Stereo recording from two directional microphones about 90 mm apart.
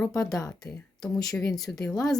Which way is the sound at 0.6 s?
45° left (ahead or behind).